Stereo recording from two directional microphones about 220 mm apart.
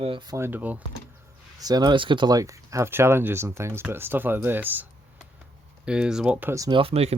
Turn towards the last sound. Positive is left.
turn(degrees=-25)  # may be behind; listen again after turning